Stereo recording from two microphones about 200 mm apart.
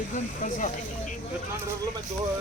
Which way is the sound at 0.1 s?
40° left (ahead or behind).